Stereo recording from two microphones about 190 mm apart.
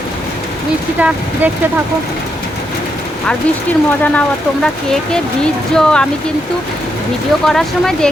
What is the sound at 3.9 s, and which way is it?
Speech, 5° left (ahead or behind).